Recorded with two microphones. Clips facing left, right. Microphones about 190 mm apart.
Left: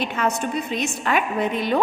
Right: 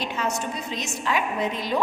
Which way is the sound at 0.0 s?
60° left (ahead or behind).